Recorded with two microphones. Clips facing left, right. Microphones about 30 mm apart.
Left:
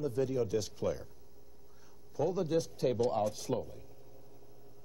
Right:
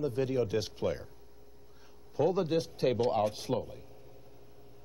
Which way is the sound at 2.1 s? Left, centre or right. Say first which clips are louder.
Right 3 dB; right.